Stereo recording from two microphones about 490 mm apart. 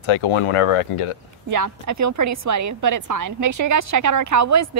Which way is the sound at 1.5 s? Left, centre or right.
Right.